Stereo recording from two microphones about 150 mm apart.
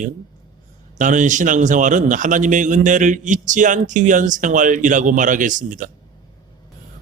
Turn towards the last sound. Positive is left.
turn(degrees=-60)  # may be behind; listen again after turning